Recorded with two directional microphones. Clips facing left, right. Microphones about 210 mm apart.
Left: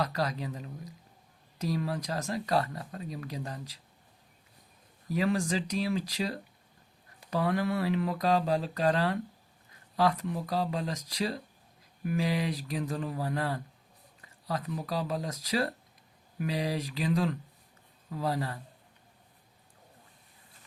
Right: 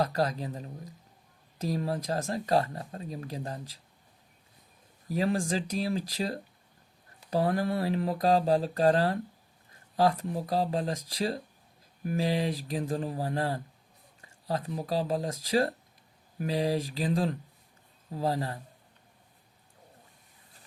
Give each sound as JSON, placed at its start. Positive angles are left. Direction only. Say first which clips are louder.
{"t": 0.0, "sound": "speech", "louder": "right 3 dB", "side_deg": -30}
{"t": 1.7, "sound": "speech", "louder": "right 2 dB", "side_deg": -35}
{"t": 5.1, "sound": "speech", "louder": "even", "side_deg": -30}